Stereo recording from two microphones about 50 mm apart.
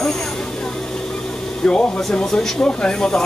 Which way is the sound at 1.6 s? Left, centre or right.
Centre.